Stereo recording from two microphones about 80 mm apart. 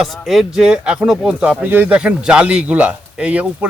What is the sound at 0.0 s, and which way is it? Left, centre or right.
Speech, centre.